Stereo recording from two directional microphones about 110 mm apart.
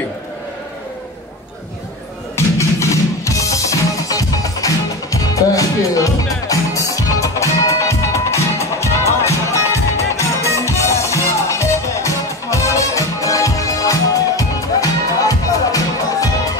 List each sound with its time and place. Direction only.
2.3 s music: 25° left (ahead or behind)